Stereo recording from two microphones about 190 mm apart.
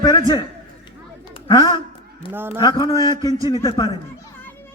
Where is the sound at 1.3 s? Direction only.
20° left (ahead or behind).